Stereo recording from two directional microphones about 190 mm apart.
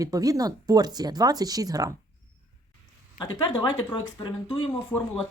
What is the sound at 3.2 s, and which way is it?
Speech, 25° left (ahead or behind).